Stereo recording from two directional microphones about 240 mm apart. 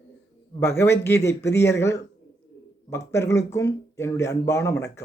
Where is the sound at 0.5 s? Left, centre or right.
Centre.